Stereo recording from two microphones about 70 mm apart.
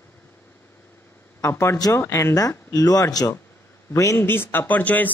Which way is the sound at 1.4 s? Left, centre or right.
Left.